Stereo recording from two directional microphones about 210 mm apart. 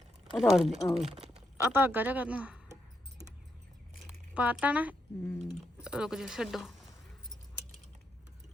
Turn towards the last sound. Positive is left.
turn(degrees=0)  # may be behind; listen again after turning